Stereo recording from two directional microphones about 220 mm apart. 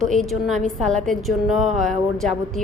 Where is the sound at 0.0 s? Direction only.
Centre (ahead or behind).